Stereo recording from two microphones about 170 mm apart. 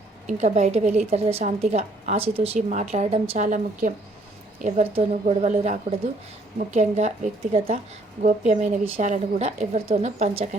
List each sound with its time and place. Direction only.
0.3 s a woman's voice: 40° right (ahead or behind)